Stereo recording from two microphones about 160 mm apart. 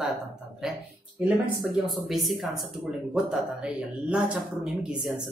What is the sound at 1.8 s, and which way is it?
A woman's voice, centre (ahead or behind).